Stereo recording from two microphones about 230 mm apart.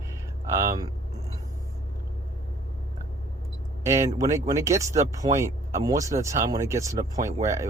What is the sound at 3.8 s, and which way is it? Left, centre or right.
Speech, centre.